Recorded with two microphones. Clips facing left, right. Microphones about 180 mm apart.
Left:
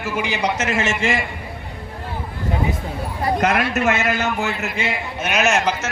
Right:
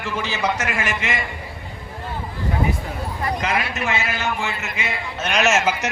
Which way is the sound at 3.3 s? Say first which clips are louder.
Left 7 dB; 60° left (ahead or behind).